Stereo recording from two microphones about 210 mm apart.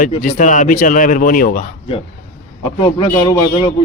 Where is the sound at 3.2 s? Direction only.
20° left (ahead or behind).